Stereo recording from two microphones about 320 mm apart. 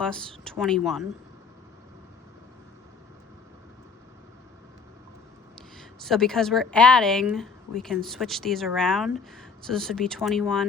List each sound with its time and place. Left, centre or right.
0.0 s a woman's voice: centre
6.0 s a woman's voice: centre